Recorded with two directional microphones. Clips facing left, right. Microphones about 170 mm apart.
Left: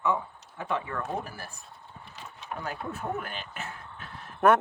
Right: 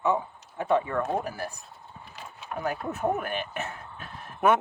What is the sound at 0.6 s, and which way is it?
Speech, 15° right (ahead or behind).